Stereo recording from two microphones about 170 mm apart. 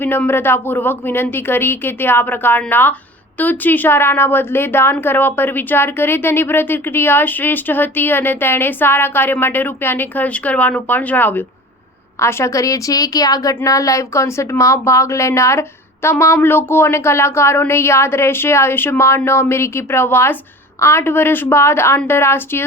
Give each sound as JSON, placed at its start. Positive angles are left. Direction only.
{"t": 0.0, "sound": "a woman's voice", "side_deg": 10}